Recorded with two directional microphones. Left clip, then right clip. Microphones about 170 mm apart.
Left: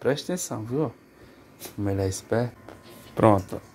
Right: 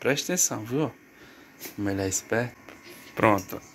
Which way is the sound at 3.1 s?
40° left (ahead or behind).